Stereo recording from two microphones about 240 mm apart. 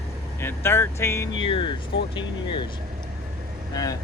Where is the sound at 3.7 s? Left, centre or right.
Centre.